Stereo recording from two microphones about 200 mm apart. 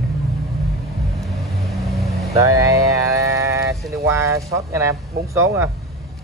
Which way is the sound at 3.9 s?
15° right (ahead or behind).